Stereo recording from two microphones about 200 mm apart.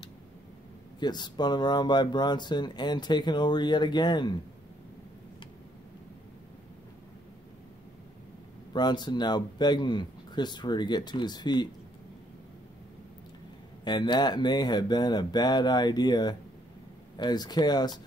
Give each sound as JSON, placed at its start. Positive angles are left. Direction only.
{"t": 0.9, "sound": "speech", "side_deg": 20}
{"t": 8.7, "sound": "speech", "side_deg": 20}
{"t": 13.8, "sound": "speech", "side_deg": 20}